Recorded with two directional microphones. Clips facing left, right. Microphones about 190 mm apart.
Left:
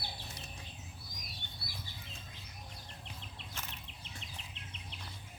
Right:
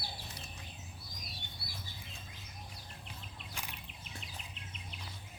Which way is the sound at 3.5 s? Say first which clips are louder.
Right 1 dB; 15° right (ahead or behind).